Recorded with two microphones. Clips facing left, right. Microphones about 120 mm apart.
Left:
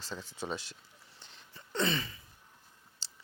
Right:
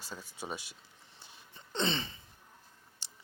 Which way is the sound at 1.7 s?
25° right (ahead or behind).